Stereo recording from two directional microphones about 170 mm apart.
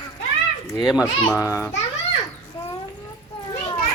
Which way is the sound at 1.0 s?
20° left (ahead or behind).